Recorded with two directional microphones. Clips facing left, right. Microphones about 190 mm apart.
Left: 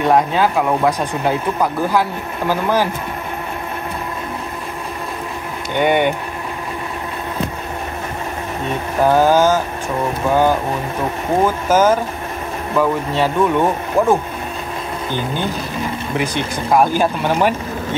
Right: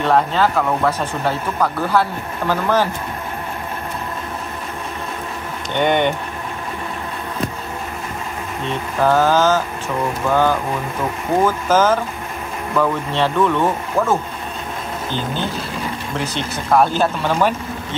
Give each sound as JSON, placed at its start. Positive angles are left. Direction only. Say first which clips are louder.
{"t": 0.0, "sound": "speech", "louder": "left 2 dB", "side_deg": 10}
{"t": 5.8, "sound": "speech", "louder": "left 1 dB", "side_deg": 10}
{"t": 9.0, "sound": "speech", "louder": "left 2 dB", "side_deg": 15}
{"t": 11.4, "sound": "speech", "louder": "left 2 dB", "side_deg": 10}
{"t": 16.2, "sound": "speech", "louder": "left 4 dB", "side_deg": 10}